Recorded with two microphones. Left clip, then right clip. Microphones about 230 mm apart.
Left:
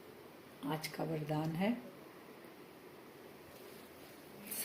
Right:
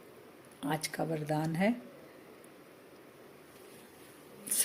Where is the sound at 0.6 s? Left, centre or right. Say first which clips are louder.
Right 6 dB; right.